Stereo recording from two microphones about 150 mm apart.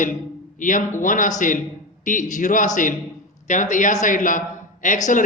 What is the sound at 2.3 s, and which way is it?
A man's voice, 60° left (ahead or behind).